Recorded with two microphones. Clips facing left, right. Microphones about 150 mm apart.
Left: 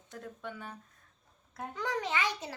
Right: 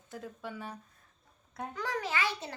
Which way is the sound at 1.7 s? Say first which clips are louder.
Left 1 dB; 20° left (ahead or behind).